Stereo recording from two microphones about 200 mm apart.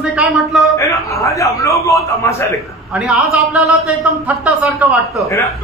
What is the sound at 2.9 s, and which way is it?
A man's voice, 5° right (ahead or behind).